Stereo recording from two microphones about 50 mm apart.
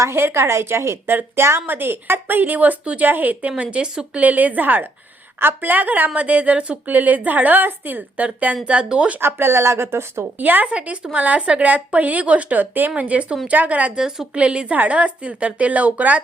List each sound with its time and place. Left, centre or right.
0.0 s speech: right
1.6 s a woman's voice: right
9.2 s speech: right
10.3 s a woman's voice: right
10.7 s a woman's voice: right
13.9 s a woman's voice: centre
14.3 s speech: right